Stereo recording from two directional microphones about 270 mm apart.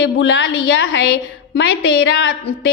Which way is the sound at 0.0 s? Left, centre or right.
Left.